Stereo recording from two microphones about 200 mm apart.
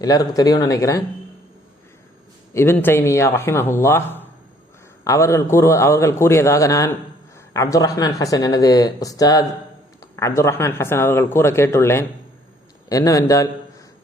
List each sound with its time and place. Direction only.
0.0 s speech: 15° left (ahead or behind)
2.5 s a man's voice: 10° left (ahead or behind)